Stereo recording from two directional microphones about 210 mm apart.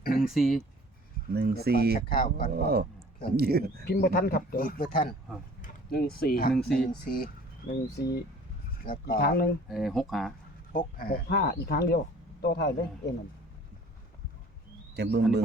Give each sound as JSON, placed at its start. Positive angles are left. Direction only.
{"t": 0.2, "sound": "speech", "side_deg": 0}
{"t": 1.3, "sound": "speech", "side_deg": -50}
{"t": 2.1, "sound": "speech", "side_deg": 40}
{"t": 2.5, "sound": "speech", "side_deg": -45}
{"t": 3.8, "sound": "speech", "side_deg": 50}
{"t": 5.6, "sound": "a sound", "side_deg": 45}
{"t": 6.1, "sound": "speech", "side_deg": 45}
{"t": 6.5, "sound": "speech", "side_deg": 5}
{"t": 7.7, "sound": "speech", "side_deg": 50}
{"t": 9.6, "sound": "speech", "side_deg": 0}
{"t": 10.7, "sound": "speech", "side_deg": 40}
{"t": 14.9, "sound": "speech", "side_deg": -50}